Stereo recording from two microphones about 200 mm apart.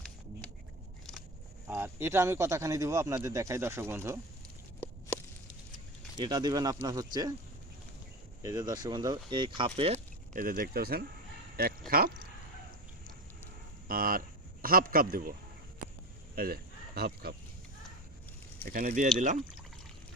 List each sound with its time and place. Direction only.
1.6 s speech: 10° right (ahead or behind)
4.8 s a sound: 5° left (ahead or behind)
6.1 s speech: 20° right (ahead or behind)
8.4 s speech: 20° right (ahead or behind)
10.3 s speech: 45° right (ahead or behind)
13.8 s speech: 45° right (ahead or behind)
16.3 s a sound: 50° right (ahead or behind)
18.6 s speech: 45° right (ahead or behind)